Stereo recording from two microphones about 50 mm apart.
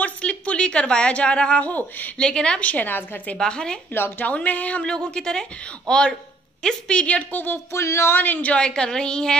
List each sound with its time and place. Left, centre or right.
0.0 s a woman's voice: left
2.1 s a woman's voice: centre
2.6 s a woman's voice: left
3.3 s a woman's voice: centre
3.9 s a woman's voice: left
4.3 s a woman's voice: left
7.7 s speech: left
8.2 s a woman's voice: left
8.5 s a woman's voice: centre